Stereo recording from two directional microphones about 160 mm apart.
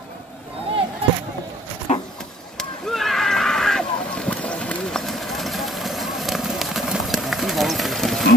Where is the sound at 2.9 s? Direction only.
Centre (ahead or behind).